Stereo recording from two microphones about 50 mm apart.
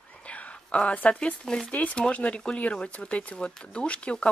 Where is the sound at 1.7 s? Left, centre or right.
Left.